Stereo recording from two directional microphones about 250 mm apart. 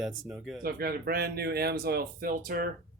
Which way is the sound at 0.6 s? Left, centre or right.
Right.